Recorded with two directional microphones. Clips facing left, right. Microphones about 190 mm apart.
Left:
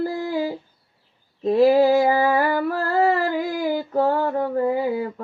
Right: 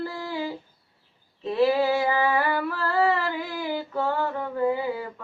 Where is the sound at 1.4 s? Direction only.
40° left (ahead or behind).